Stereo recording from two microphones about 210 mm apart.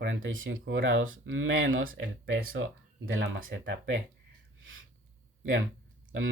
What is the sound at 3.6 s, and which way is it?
Speech, 60° right (ahead or behind).